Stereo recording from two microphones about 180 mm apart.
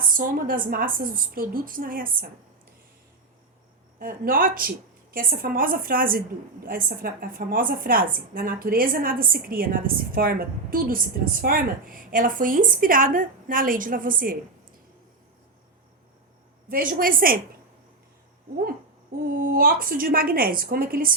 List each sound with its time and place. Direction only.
0.1 s a woman's voice: 50° right (ahead or behind)
4.0 s a woman's voice: 55° right (ahead or behind)
16.9 s a woman's voice: 50° right (ahead or behind)
19.2 s a woman's voice: 55° right (ahead or behind)